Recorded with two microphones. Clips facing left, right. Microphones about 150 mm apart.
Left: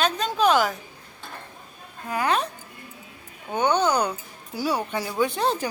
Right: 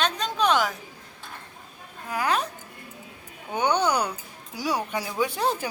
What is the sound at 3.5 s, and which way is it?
A woman's voice, 10° right (ahead or behind).